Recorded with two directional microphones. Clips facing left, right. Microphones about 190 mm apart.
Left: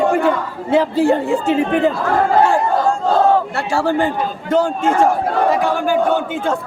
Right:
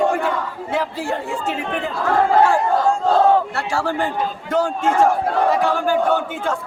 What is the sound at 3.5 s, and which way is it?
Speech, 25° left (ahead or behind).